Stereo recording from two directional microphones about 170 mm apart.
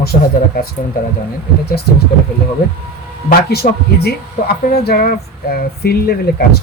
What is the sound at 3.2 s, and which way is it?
Speech, 65° left (ahead or behind).